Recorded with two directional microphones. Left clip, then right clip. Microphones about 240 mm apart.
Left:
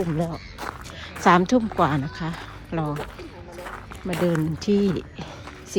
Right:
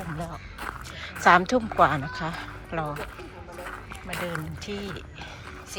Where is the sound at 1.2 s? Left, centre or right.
Centre.